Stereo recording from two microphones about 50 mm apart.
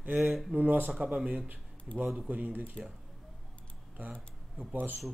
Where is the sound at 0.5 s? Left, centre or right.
Right.